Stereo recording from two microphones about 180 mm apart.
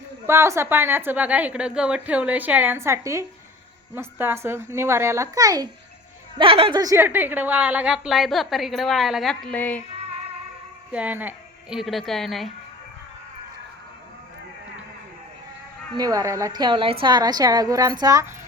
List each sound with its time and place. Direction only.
0.3 s a woman's voice: 15° right (ahead or behind)
6.4 s a woman's voice: 30° right (ahead or behind); by 9.8 s 10° left (ahead or behind)
10.9 s a woman's voice: 10° right (ahead or behind)
16.0 s a woman's voice: 20° right (ahead or behind)